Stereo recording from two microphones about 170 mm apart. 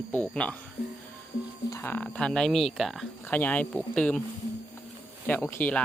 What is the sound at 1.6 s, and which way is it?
Speech, 15° left (ahead or behind).